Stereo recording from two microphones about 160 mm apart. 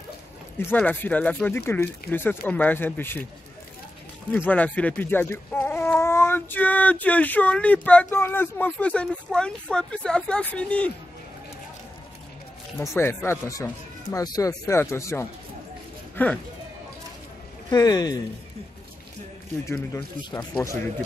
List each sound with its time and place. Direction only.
0.6 s speech: 10° left (ahead or behind)
4.5 s speech: 10° left (ahead or behind)
12.7 s speech: 15° left (ahead or behind)
17.6 s speech: 25° left (ahead or behind)
19.6 s speech: 15° left (ahead or behind)